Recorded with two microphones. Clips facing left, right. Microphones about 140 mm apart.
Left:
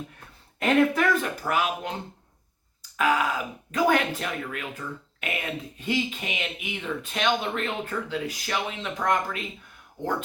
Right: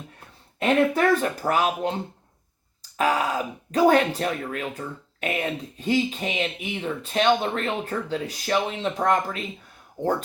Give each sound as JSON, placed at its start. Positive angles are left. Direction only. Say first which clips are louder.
{"t": 0.6, "sound": "speech", "louder": "right 1 dB", "side_deg": -35}